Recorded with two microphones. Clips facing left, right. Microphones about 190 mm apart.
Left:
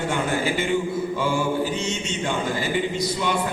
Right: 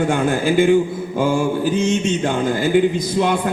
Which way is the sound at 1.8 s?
50° right (ahead or behind).